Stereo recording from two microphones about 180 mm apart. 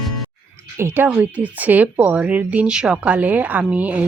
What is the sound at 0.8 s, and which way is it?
Speech, 10° right (ahead or behind).